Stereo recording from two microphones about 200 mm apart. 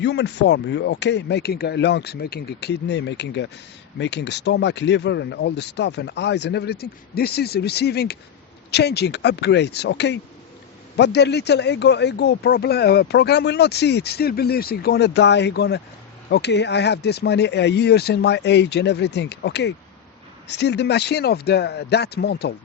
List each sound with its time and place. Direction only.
0.0 s speech: 60° left (ahead or behind)